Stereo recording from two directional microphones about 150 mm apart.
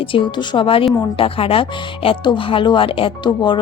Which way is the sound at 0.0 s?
35° left (ahead or behind).